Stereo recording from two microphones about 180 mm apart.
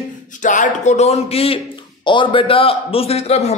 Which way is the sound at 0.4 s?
45° left (ahead or behind).